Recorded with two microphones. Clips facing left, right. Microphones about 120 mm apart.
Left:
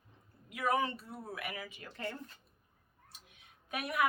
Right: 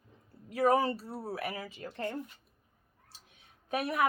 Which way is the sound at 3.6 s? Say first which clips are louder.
Right 3 dB; 35° right (ahead or behind).